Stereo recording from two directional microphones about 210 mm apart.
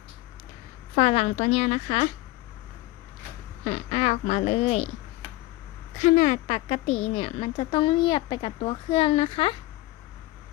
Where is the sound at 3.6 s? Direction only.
30° left (ahead or behind).